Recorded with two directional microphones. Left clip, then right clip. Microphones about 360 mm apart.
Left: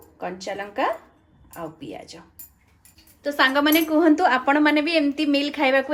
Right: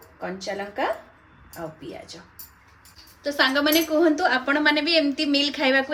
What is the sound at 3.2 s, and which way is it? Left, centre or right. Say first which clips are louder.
A woman's voice: left 2 dB; centre.